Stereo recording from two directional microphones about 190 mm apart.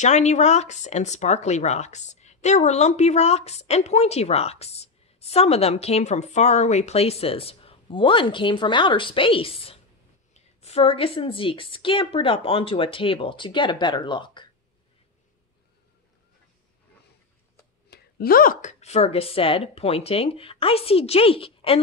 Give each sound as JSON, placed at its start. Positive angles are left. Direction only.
{"t": 0.0, "sound": "speech", "side_deg": 35}
{"t": 17.8, "sound": "speech", "side_deg": 55}